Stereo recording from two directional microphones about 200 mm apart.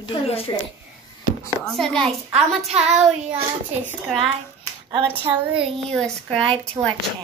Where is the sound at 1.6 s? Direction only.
5° left (ahead or behind).